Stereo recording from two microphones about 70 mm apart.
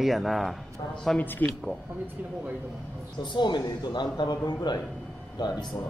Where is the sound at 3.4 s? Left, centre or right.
Left.